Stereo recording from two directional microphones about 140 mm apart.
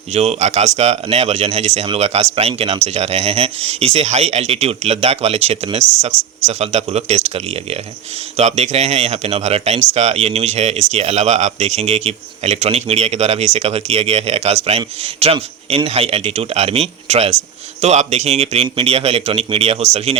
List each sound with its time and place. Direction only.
0.1 s speech: 50° right (ahead or behind)